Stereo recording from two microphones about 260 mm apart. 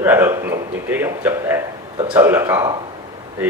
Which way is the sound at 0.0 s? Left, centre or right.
Centre.